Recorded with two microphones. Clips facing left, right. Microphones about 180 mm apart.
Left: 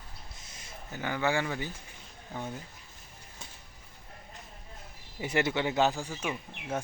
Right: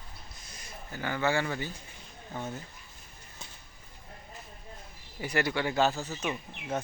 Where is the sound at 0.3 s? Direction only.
25° left (ahead or behind).